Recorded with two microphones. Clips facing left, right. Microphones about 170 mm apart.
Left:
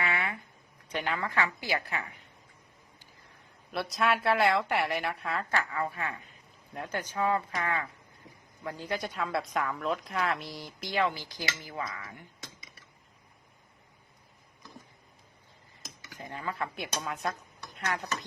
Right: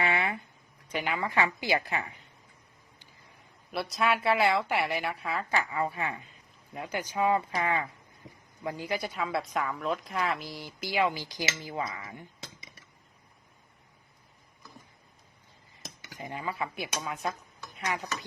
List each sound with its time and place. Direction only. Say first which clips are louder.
0.0 s a sound: right 4 dB; 25° right (ahead or behind)
0.9 s a woman's voice: right 1 dB; 5° right (ahead or behind)
3.7 s a woman's voice: even; centre (ahead or behind); by 6.1 s 20° right (ahead or behind)
6.7 s a woman's voice: right 2 dB; 5° right (ahead or behind)
16.1 s a woman's voice: right 1 dB; 15° right (ahead or behind)